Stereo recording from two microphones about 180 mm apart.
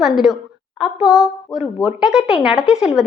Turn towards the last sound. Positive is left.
turn(degrees=-5)  # may be behind; listen again after turning